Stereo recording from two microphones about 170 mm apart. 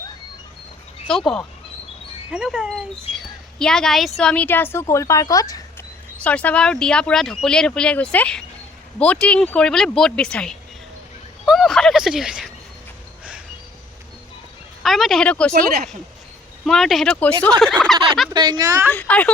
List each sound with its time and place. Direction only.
1.0 s speech: 5° left (ahead or behind)
3.2 s a sound: 5° left (ahead or behind)
4.2 s a woman's voice: 5° left (ahead or behind)
6.2 s speech: 5° left (ahead or behind)
11.4 s a sound: centre (ahead or behind)
14.8 s speech: centre (ahead or behind)
16.6 s speech: centre (ahead or behind)
17.8 s a sound: 5° left (ahead or behind)
18.3 s a woman's voice: 25° right (ahead or behind)
18.9 s a woman's voice: 10° left (ahead or behind)